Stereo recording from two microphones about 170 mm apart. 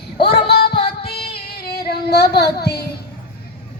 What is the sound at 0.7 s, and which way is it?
Music, 35° left (ahead or behind).